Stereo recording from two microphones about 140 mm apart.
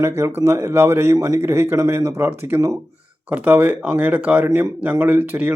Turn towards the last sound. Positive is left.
turn(degrees=-15)  # may be behind; listen again after turning